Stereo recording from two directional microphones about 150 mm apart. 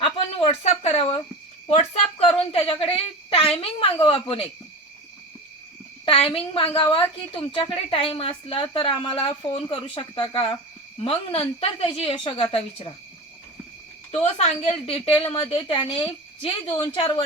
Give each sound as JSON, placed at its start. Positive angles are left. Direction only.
{"t": 0.0, "sound": "a sound", "side_deg": 40}
{"t": 6.1, "sound": "a woman's voice", "side_deg": 40}
{"t": 14.1, "sound": "a woman's voice", "side_deg": 45}